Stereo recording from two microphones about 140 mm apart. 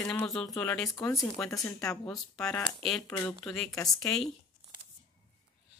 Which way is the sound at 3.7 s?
25° left (ahead or behind).